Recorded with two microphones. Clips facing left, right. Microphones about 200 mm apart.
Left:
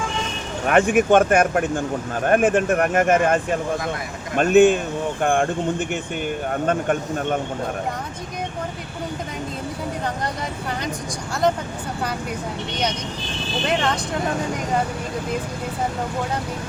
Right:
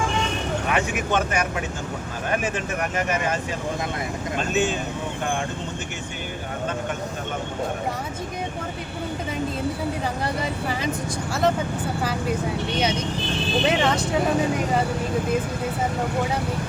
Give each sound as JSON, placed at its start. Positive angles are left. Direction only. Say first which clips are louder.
{"t": 0.7, "sound": "speech", "louder": "left 10 dB", "side_deg": 55}
{"t": 13.7, "sound": "speech", "louder": "even", "side_deg": -5}